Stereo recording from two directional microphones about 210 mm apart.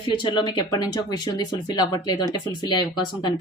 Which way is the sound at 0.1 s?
20° left (ahead or behind).